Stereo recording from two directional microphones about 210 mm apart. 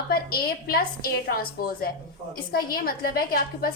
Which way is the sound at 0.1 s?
45° left (ahead or behind).